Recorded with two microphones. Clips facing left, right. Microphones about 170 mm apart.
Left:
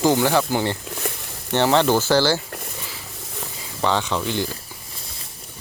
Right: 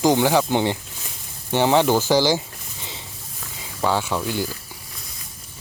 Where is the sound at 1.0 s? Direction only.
70° left (ahead or behind).